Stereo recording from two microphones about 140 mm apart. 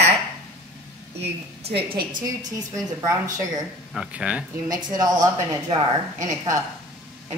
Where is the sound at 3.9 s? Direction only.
10° right (ahead or behind).